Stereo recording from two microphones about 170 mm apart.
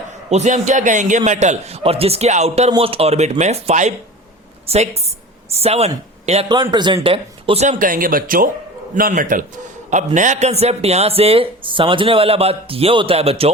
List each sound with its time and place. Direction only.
0.3 s a man's voice: 40° right (ahead or behind)
6.5 s a man's voice: 25° right (ahead or behind)